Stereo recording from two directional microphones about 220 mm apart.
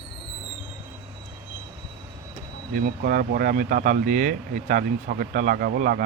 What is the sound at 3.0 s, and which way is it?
Speech, 40° right (ahead or behind).